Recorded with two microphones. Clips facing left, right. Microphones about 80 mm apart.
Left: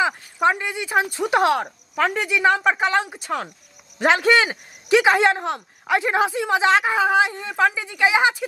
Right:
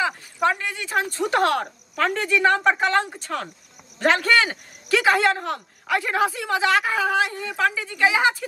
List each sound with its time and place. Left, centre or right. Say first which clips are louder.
0.0 s speech: left 3 dB; centre